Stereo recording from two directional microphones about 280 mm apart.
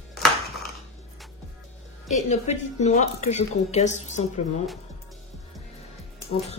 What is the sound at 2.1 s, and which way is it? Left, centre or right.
A woman's voice, left.